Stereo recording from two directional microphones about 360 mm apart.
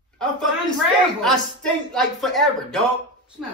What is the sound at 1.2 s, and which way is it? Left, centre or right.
Speech, centre.